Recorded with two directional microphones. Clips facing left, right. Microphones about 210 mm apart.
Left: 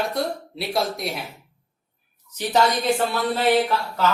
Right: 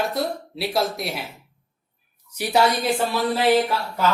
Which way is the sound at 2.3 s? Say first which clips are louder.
Right 1 dB; 10° right (ahead or behind).